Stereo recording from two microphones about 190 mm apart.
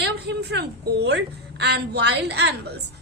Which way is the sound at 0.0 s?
65° right (ahead or behind).